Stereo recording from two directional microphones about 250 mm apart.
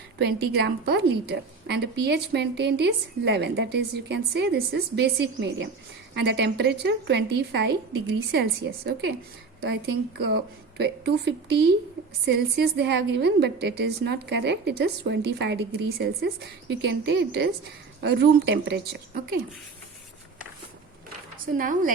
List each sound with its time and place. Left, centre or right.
0.3 s a woman's voice: right
21.6 s a woman's voice: right